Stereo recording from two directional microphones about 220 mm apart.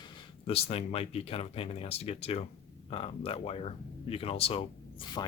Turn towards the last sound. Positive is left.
turn(degrees=20)  # may be behind; listen again after turning